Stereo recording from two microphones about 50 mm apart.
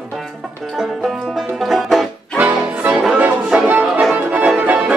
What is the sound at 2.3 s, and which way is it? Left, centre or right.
Music, right.